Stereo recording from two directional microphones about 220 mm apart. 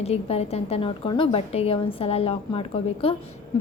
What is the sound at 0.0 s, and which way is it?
A woman's voice, 30° left (ahead or behind).